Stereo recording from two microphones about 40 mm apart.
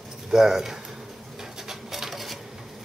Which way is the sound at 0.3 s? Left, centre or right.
Centre.